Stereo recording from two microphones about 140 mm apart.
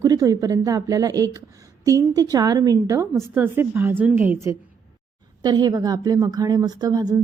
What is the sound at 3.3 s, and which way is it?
A woman's voice, 15° right (ahead or behind).